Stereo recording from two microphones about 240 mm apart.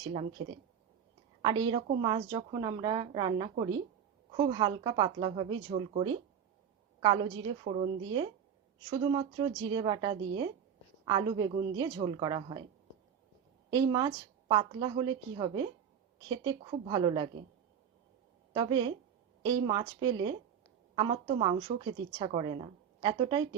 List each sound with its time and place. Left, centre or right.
0.0 s a woman's voice: right
13.7 s a woman's voice: centre
18.5 s a woman's voice: centre